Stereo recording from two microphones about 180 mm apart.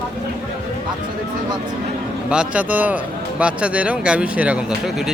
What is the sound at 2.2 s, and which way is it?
Speech, 5° right (ahead or behind).